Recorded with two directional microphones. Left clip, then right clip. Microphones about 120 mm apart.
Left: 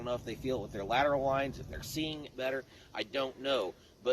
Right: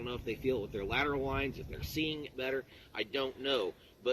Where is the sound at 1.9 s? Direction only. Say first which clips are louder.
Right 2 dB; 45° left (ahead or behind).